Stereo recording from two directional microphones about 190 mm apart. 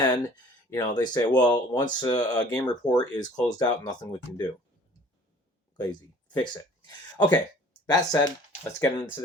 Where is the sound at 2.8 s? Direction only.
5° left (ahead or behind).